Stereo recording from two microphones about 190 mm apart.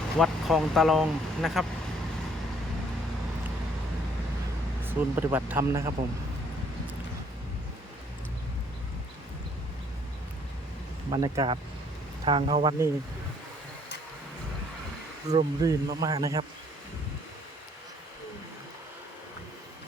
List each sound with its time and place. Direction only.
0.2 s speech: centre (ahead or behind)
4.8 s speech: 10° right (ahead or behind)
11.1 s speech: 20° right (ahead or behind)
15.3 s speech: 20° right (ahead or behind)